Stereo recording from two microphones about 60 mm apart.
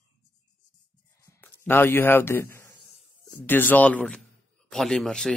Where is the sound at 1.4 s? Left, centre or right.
Left.